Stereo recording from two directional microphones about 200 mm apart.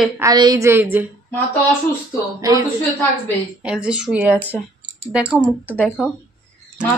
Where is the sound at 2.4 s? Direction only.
15° right (ahead or behind).